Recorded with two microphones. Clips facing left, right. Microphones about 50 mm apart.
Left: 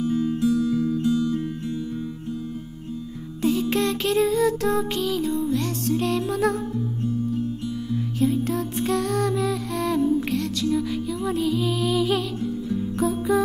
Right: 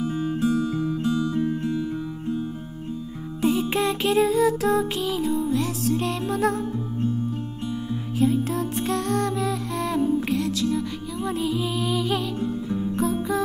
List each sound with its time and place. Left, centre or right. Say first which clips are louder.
0.2 s music: right 1 dB; right
3.4 s music: even; centre
8.2 s music: right 1 dB; centre
12.4 s music: even; right
13.0 s music: left 4 dB; centre